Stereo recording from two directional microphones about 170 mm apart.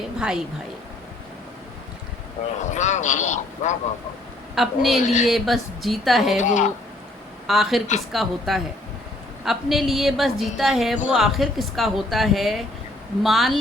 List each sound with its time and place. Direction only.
0.2 s speech: 5° right (ahead or behind)
2.7 s speech: 45° left (ahead or behind)
4.5 s speech: centre (ahead or behind)
5.0 s speech: 45° left (ahead or behind)
5.3 s speech: centre (ahead or behind)
6.4 s speech: 45° left (ahead or behind)
7.4 s speech: centre (ahead or behind)